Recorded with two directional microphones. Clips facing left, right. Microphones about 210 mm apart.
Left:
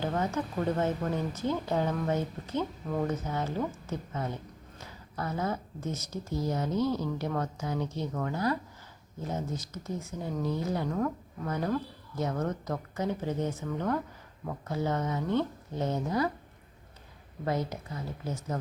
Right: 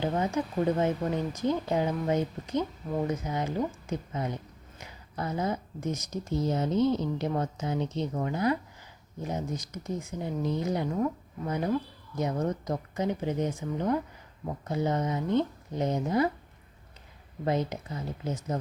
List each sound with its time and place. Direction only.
0.0 s speech: 15° right (ahead or behind)
17.4 s speech: 20° right (ahead or behind)